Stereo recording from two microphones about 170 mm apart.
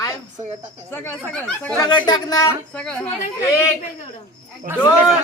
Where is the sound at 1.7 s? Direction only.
25° left (ahead or behind).